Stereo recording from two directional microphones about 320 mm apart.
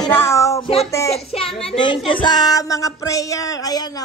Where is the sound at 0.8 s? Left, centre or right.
Centre.